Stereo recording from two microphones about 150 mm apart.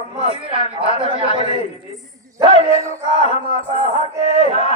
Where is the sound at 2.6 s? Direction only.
45° left (ahead or behind).